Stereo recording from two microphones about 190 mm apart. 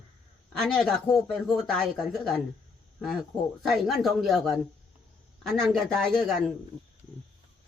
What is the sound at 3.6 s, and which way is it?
Speech, centre (ahead or behind).